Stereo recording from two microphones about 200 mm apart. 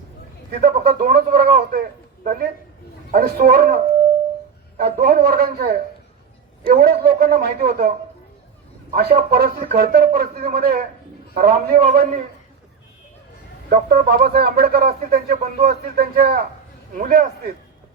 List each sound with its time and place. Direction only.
0.5 s speech: 45° right (ahead or behind)
4.8 s speech: 45° right (ahead or behind)
6.8 s speech: 50° right (ahead or behind)
9.0 s speech: 50° right (ahead or behind)
13.7 s speech: 45° right (ahead or behind)